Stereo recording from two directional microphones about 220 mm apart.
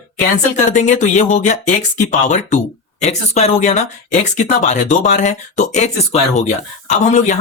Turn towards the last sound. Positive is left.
turn(degrees=35)  # may be behind; listen again after turning